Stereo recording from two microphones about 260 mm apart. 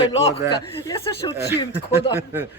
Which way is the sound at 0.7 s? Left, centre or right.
Centre.